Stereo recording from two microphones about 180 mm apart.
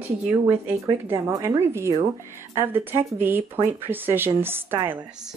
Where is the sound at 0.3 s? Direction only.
10° right (ahead or behind).